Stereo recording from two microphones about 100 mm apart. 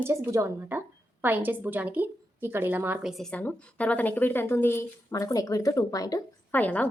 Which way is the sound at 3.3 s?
15° left (ahead or behind).